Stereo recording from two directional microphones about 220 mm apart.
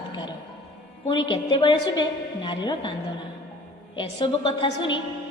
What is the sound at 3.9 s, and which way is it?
A woman's voice, 20° left (ahead or behind).